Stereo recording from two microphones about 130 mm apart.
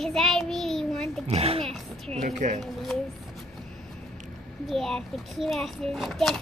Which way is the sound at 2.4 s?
75° right (ahead or behind).